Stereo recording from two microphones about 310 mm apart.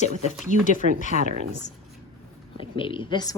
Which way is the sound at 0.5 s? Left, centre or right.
Left.